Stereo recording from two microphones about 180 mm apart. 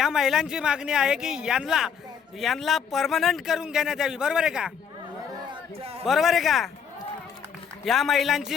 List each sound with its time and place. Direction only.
0.0 s speech: centre (ahead or behind)
5.5 s a sound: 35° right (ahead or behind)
6.1 s speech: centre (ahead or behind)
7.9 s speech: centre (ahead or behind)